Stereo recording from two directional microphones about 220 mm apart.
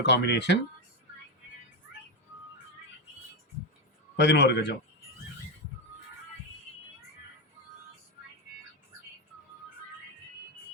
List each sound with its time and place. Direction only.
0.0 s speech: 50° left (ahead or behind)
4.2 s speech: 50° left (ahead or behind)